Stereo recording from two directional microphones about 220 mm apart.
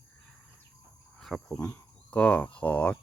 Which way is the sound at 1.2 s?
Centre (ahead or behind).